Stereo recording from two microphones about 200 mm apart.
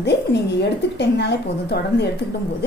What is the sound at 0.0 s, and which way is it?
A woman's voice, 60° left (ahead or behind).